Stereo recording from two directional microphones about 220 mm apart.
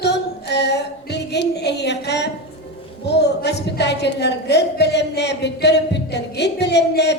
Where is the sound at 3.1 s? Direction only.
50° left (ahead or behind).